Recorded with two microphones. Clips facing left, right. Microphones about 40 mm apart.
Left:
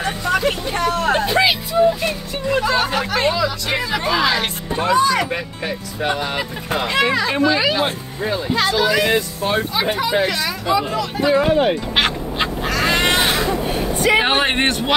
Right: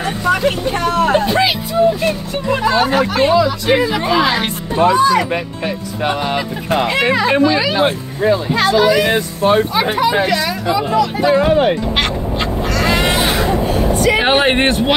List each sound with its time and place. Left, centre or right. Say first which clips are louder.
0.0 s vehicle: right 3 dB; centre
1.0 s a sound: right 2 dB; centre
2.4 s speech: right 3 dB; centre
4.9 s speech: right 3 dB; centre; by 7.4 s right
7.4 s speech: right 2 dB; centre
8.2 s speech: right 5 dB; right
8.8 s speech: right 4 dB; centre
9.1 s speech: right 5 dB; right
10.1 s speech: right 3 dB; right
11.9 s duck: right 1 dB; centre
12.9 s crow: right 1 dB; centre
14.2 s speech: right 4 dB; centre